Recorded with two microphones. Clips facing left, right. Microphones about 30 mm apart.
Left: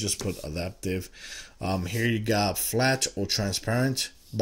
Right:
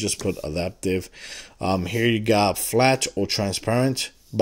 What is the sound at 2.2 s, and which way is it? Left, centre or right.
Speech, right.